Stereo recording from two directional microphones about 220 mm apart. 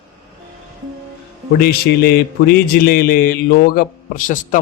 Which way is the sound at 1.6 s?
45° left (ahead or behind).